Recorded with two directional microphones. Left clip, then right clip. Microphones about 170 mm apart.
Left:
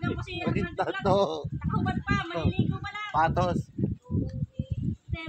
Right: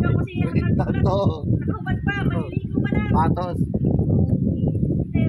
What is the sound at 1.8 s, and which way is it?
Speech, 80° left.